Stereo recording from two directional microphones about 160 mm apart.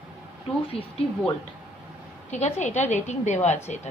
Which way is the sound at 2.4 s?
45° left (ahead or behind).